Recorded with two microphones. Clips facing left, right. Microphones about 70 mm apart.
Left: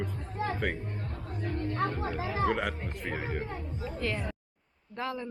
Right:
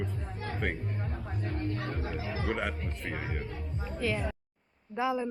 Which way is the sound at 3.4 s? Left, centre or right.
Left.